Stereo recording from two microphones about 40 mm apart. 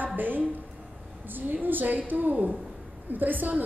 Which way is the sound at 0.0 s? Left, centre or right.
Right.